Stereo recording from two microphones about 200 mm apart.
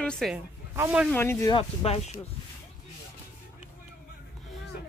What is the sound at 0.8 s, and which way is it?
Speech, 10° right (ahead or behind).